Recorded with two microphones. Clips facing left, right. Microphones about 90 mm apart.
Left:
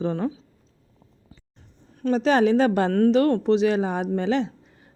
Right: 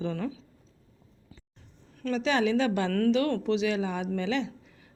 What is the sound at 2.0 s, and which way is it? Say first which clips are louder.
Speech: left 7 dB; 40° left (ahead or behind).